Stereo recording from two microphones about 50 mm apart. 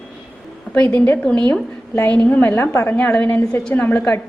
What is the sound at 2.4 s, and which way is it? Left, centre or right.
Speech, left.